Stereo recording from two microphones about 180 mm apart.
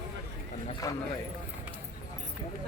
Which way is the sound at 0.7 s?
20° left (ahead or behind).